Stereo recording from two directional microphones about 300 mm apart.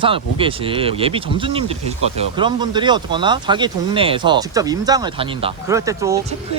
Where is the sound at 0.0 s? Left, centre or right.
Centre.